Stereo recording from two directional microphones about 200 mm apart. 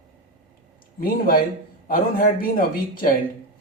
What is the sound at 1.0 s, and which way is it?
Speech, 45° left (ahead or behind).